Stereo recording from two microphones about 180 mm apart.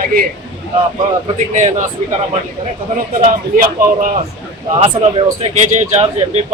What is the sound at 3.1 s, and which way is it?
A man's voice, 45° right (ahead or behind).